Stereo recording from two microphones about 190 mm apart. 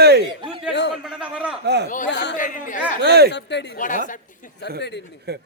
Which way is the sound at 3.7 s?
40° left (ahead or behind).